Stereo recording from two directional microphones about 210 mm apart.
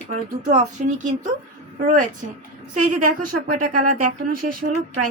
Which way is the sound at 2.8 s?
40° right (ahead or behind).